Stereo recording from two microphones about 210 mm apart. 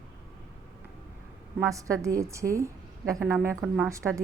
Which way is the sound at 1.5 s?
15° right (ahead or behind).